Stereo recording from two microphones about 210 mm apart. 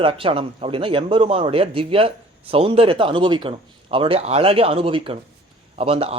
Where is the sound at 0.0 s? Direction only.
25° right (ahead or behind).